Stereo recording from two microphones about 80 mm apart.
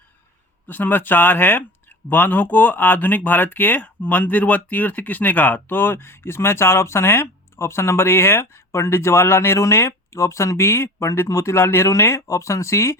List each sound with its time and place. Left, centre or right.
0.7 s speech: left